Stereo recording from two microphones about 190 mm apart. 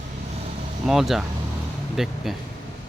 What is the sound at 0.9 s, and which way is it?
Speech, centre (ahead or behind).